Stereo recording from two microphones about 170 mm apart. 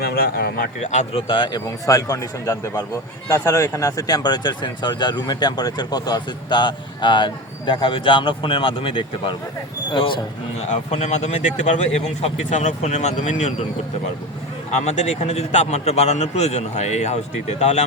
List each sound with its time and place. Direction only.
0.0 s speech: 65° left (ahead or behind)
0.8 s speech: 40° left (ahead or behind)
1.3 s speech: 25° left (ahead or behind)
10.7 s a man's voice: 40° left (ahead or behind)
14.7 s a man's voice: 40° left (ahead or behind)